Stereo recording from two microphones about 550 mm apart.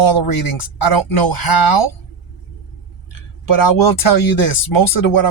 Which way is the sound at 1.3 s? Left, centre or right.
Left.